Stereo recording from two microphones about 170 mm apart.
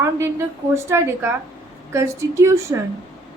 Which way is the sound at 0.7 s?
15° right (ahead or behind).